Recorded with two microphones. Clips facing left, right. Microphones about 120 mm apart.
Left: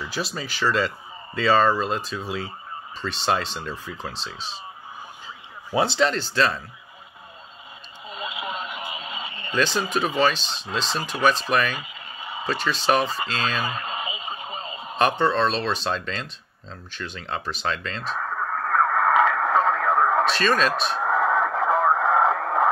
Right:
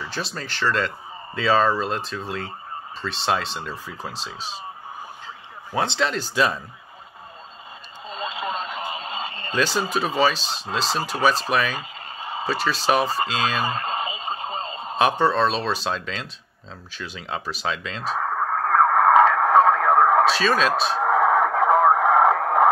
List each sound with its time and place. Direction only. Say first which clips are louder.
0.1 s speech: left 1 dB; 5° left (ahead or behind)
5.8 s speech: left 2 dB; 5° left (ahead or behind)
8.1 s radio: right 3 dB; 40° right (ahead or behind)
9.9 s speech: even; centre (ahead or behind)
10.4 s speech: right 2 dB; 40° right (ahead or behind)
11.7 s a sound: right 2 dB; 40° right (ahead or behind)
12.4 s speech: even; 5° right (ahead or behind)
13.6 s radio: right 4 dB; 40° right (ahead or behind)
15.0 s speech: right 1 dB; 5° right (ahead or behind)
18.0 s sidetone: right 5 dB; 45° right (ahead or behind)
20.3 s speech: right 1 dB; 5° right (ahead or behind)
21.0 s radio: right 3 dB; 45° right (ahead or behind)